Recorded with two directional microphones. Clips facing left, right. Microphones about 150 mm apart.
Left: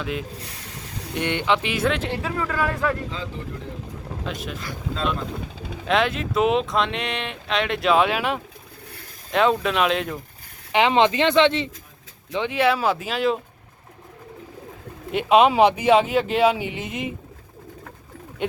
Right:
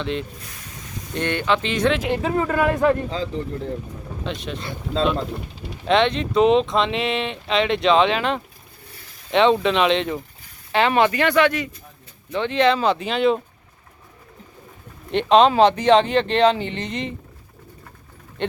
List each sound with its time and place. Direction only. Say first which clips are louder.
0.0 s speech: right 2 dB; 5° left (ahead or behind)
2.2 s a man's voice: right 7 dB; 30° right (ahead or behind)
4.3 s speech: right 3 dB; 5° left (ahead or behind)
5.0 s speech: right 6 dB; 30° right (ahead or behind)
5.8 s speech: right 3 dB; centre (ahead or behind)
10.7 s speech: even; 15° left (ahead or behind)
12.3 s speech: right 2 dB; 10° left (ahead or behind)
15.1 s speech: right 1 dB; 10° left (ahead or behind)